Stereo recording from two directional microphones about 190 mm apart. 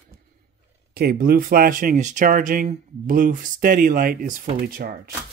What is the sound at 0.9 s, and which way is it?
Speech, 50° right (ahead or behind).